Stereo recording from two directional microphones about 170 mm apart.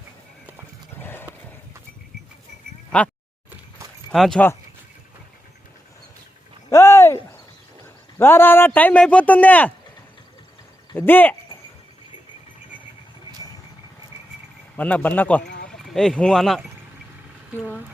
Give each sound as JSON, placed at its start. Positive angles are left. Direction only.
{"t": 0.9, "sound": "horse", "side_deg": 10}
{"t": 4.1, "sound": "speech", "side_deg": 0}
{"t": 6.7, "sound": "a sound", "side_deg": 15}
{"t": 8.2, "sound": "a man's voice", "side_deg": 15}
{"t": 10.9, "sound": "a man's voice", "side_deg": 10}
{"t": 14.8, "sound": "a man's voice", "side_deg": 10}